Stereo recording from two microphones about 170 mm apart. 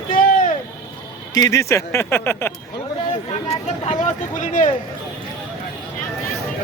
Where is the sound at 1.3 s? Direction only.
20° left (ahead or behind).